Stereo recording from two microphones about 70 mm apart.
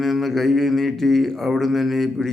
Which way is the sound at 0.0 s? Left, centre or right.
Centre.